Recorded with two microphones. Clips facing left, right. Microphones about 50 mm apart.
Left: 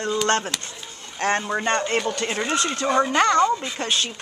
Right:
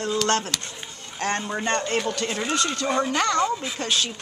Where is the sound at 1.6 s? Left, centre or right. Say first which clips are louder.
Left 1 dB; centre.